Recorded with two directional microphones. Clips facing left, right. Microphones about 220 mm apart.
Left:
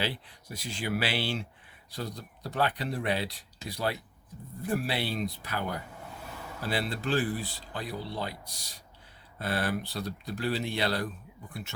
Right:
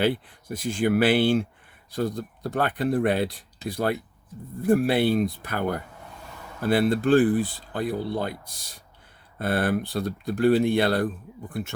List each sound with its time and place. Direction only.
0.0 s speech: 50° right (ahead or behind)